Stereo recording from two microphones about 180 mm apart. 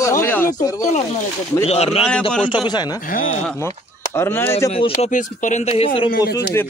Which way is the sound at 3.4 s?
10° left (ahead or behind).